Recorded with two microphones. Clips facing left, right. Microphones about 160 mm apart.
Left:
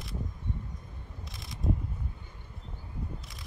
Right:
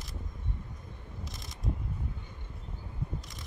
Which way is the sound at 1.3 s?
Centre (ahead or behind).